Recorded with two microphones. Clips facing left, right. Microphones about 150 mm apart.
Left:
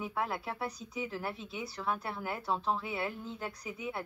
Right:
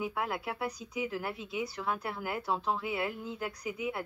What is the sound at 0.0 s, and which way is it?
Speech, centre (ahead or behind).